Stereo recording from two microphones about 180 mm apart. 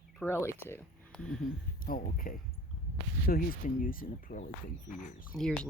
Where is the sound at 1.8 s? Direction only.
50° left (ahead or behind).